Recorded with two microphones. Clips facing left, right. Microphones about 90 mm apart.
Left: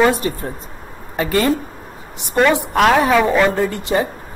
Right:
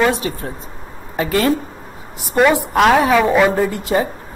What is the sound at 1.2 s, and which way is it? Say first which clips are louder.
A woman's voice: even; centre (ahead or behind).